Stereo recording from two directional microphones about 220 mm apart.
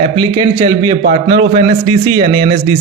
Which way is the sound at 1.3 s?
25° right (ahead or behind).